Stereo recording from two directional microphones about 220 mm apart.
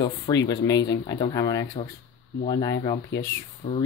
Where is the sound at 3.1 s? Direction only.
55° left (ahead or behind).